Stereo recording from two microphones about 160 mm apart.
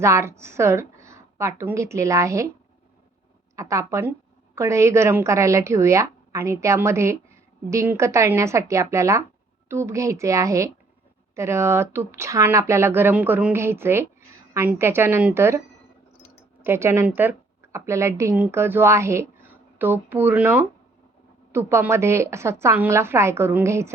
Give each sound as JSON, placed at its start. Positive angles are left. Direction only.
{"t": 0.0, "sound": "speech", "side_deg": -15}
{"t": 3.5, "sound": "a woman's voice", "side_deg": -20}
{"t": 16.6, "sound": "a woman's voice", "side_deg": -15}